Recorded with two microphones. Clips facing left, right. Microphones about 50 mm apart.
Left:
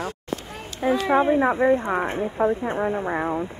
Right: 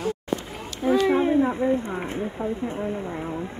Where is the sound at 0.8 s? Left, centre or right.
Left.